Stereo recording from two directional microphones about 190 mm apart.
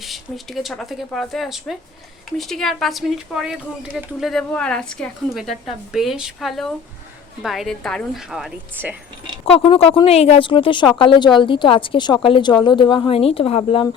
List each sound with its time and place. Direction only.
0.0 s speech: centre (ahead or behind)
9.5 s speech: 30° left (ahead or behind)